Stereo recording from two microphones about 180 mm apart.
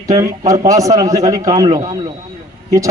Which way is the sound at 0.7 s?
20° right (ahead or behind).